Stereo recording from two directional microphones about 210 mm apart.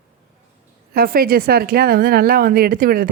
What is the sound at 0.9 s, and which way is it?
A woman's voice, 45° right (ahead or behind).